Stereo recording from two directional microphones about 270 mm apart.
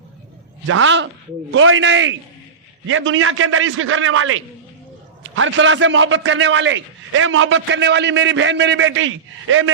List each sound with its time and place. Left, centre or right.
0.7 s a man's voice: right